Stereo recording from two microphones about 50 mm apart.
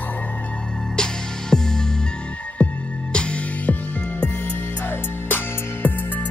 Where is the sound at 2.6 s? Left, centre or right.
Left.